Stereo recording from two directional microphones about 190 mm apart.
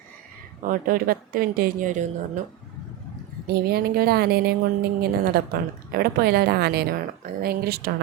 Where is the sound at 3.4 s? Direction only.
55° right (ahead or behind).